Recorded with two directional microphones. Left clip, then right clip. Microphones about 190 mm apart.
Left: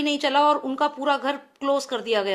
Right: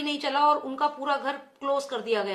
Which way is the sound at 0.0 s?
45° left (ahead or behind).